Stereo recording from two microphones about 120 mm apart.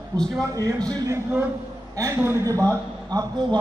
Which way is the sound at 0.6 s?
30° right (ahead or behind).